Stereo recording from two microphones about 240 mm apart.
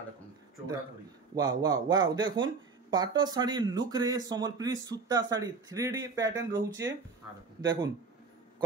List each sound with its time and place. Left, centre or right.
1.3 s speech: centre